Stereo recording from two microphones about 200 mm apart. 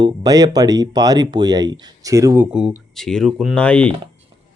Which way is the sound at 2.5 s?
5° right (ahead or behind).